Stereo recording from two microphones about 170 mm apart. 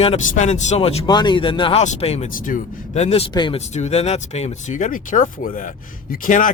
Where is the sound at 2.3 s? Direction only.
45° left (ahead or behind).